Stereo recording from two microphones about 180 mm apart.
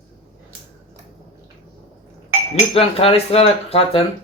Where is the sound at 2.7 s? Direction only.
30° left (ahead or behind).